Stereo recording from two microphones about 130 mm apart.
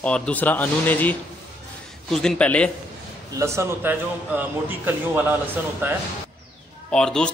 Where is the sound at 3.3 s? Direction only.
20° right (ahead or behind).